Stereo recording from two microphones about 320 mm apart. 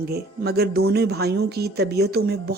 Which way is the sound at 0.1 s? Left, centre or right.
Right.